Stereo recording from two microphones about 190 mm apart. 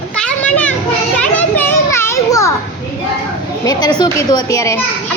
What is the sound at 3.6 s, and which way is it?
A child's voice, 20° left (ahead or behind).